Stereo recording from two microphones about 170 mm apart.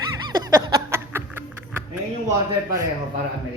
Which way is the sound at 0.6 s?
20° right (ahead or behind).